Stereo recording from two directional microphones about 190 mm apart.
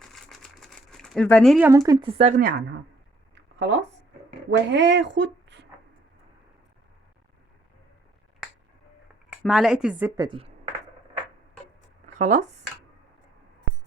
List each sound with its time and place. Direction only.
0.0 s crumpling: centre (ahead or behind)
1.6 s a woman's voice: 15° right (ahead or behind)
2.4 s a woman's voice: 50° right (ahead or behind)
3.3 s a sound: 65° right (ahead or behind)
4.7 s speech: 70° right (ahead or behind)
9.4 s speech: 5° right (ahead or behind)
10.2 s a woman's voice: 25° right (ahead or behind)
12.0 s a sound: 40° right (ahead or behind)